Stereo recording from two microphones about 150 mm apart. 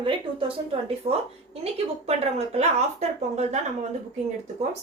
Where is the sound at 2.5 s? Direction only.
45° right (ahead or behind).